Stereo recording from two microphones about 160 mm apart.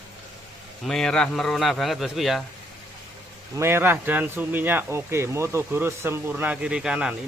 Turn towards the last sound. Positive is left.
turn(degrees=-5)  # may be behind; listen again after turning